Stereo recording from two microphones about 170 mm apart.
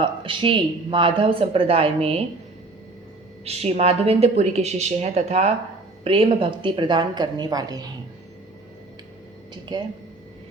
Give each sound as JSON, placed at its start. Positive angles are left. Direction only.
{"t": 0.0, "sound": "speech", "side_deg": -30}
{"t": 3.4, "sound": "a woman's voice", "side_deg": -35}
{"t": 9.7, "sound": "a woman's voice", "side_deg": -25}